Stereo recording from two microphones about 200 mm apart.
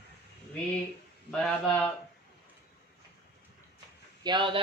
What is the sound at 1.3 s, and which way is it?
Speech, 5° left (ahead or behind).